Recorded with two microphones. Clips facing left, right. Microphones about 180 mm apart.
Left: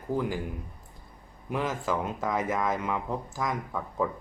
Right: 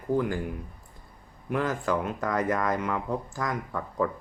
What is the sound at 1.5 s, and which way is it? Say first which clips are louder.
Speech: right 2 dB; 5° left (ahead or behind).